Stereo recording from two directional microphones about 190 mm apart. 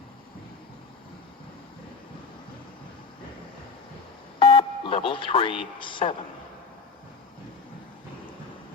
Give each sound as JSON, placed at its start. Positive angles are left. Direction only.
{"t": 4.4, "sound": "speech", "side_deg": 25}